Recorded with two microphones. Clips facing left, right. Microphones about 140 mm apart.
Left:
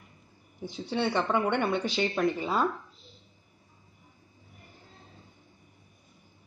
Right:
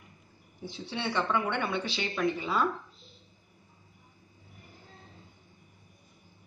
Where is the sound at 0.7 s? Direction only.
45° left (ahead or behind).